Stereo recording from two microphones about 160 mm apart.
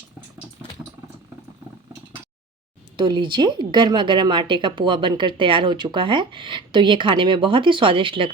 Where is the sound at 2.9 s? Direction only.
30° right (ahead or behind).